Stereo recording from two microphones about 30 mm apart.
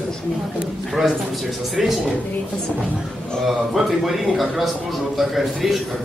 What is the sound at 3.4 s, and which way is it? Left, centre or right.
A man's voice, centre.